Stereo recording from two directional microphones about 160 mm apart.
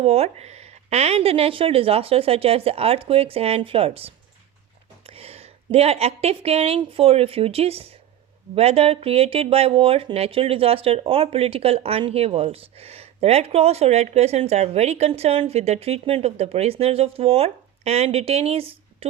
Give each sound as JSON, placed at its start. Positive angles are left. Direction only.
{"t": 0.0, "sound": "a woman's voice", "side_deg": -40}